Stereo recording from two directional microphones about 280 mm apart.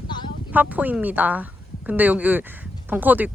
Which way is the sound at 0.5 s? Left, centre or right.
Centre.